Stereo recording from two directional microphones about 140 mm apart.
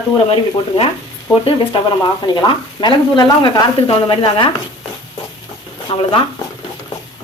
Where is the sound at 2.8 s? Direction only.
30° left (ahead or behind).